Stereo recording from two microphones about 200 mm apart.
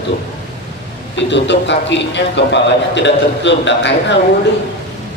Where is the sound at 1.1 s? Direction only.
65° left (ahead or behind).